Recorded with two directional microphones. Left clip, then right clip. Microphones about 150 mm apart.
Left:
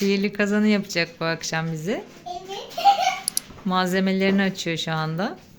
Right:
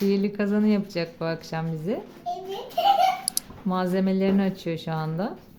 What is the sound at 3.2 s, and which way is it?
Speech, centre (ahead or behind).